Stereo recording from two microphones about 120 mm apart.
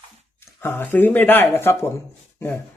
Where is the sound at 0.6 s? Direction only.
15° left (ahead or behind).